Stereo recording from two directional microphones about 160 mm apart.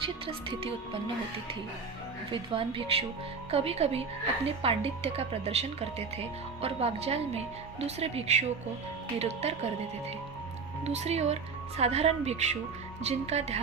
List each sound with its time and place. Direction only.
0.3 s speech: 35° right (ahead or behind)
2.3 s speech: 35° right (ahead or behind)
10.8 s speech: 40° right (ahead or behind)